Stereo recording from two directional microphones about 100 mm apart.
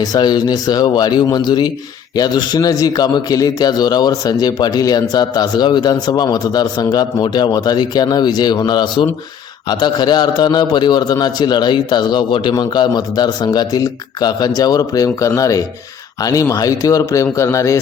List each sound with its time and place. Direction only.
0.0 s a man's voice: 40° left (ahead or behind)